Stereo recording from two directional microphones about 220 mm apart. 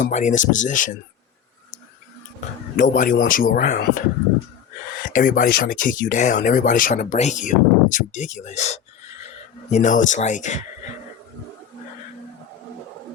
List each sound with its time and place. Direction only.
0.0 s speech: 35° left (ahead or behind)
2.7 s speech: 35° left (ahead or behind)